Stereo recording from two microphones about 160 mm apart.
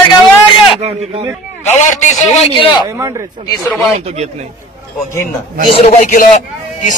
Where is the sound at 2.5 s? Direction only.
30° left (ahead or behind).